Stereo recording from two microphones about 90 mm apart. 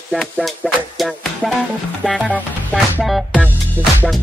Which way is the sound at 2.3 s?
15° left (ahead or behind).